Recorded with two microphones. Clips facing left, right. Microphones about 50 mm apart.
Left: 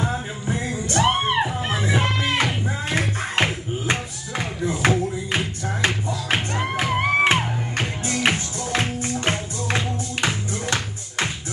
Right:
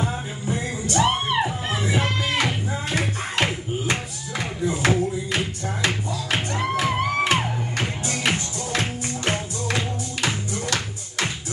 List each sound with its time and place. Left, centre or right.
0.5 s music: left
6.5 s music: centre
6.8 s music: left